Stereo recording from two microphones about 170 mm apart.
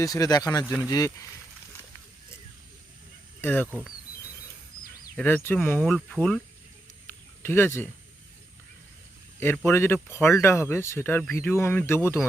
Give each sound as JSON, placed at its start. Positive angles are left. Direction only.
{"t": 0.0, "sound": "speech", "side_deg": 20}
{"t": 3.4, "sound": "speech", "side_deg": 10}
{"t": 3.7, "sound": "speech", "side_deg": -10}
{"t": 5.1, "sound": "speech", "side_deg": 10}
{"t": 7.1, "sound": "a sound", "side_deg": 15}
{"t": 9.6, "sound": "speech", "side_deg": 15}